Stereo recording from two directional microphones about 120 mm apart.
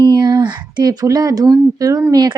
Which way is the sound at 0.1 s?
35° right (ahead or behind).